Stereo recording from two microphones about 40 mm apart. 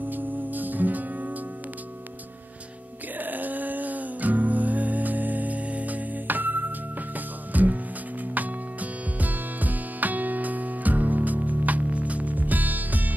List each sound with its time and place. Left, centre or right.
0.0 s music: right
3.2 s music: right
9.2 s music: right